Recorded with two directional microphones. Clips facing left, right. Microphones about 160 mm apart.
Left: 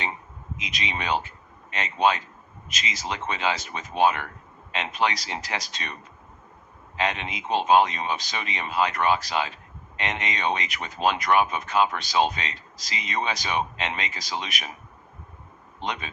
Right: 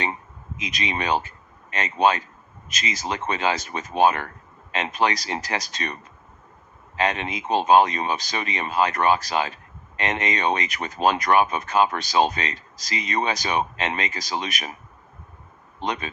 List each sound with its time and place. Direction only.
0.6 s speech: 45° right (ahead or behind)
6.9 s speech: 45° right (ahead or behind)
15.8 s speech: 45° right (ahead or behind)